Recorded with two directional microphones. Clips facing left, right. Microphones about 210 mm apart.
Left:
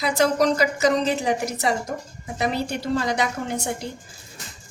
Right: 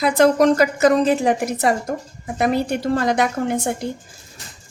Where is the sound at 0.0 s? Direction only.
55° right (ahead or behind).